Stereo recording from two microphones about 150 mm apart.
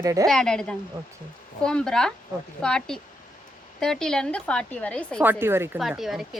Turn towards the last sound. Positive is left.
turn(degrees=0)  # may be behind; listen again after turning